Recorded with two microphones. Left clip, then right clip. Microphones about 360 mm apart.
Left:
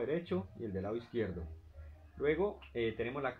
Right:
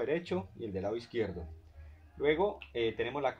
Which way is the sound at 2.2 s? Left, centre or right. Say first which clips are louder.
Right 4 dB; centre.